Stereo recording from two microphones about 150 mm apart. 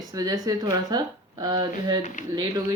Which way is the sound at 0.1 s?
25° right (ahead or behind).